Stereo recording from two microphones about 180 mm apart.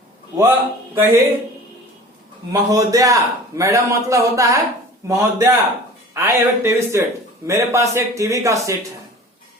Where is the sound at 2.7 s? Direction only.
20° right (ahead or behind).